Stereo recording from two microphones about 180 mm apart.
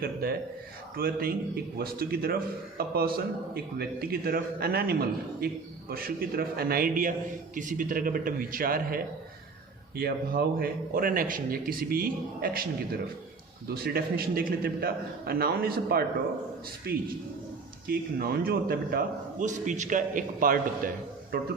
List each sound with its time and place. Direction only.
0.0 s a man's voice: 55° right (ahead or behind)
17.8 s a man's voice: 55° right (ahead or behind)